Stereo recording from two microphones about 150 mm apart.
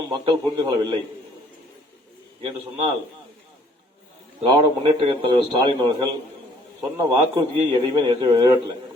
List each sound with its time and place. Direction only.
0.1 s a man's voice: 30° right (ahead or behind)
4.4 s a man's voice: 35° right (ahead or behind)